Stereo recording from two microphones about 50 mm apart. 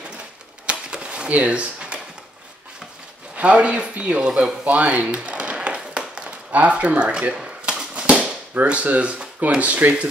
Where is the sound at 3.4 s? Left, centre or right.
Right.